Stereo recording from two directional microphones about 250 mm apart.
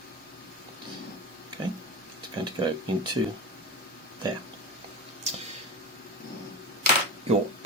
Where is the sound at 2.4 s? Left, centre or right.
Centre.